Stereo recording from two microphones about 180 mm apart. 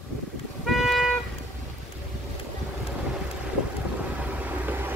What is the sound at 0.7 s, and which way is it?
Music, centre (ahead or behind).